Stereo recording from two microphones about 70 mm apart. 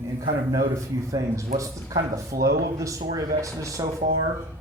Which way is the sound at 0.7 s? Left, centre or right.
Right.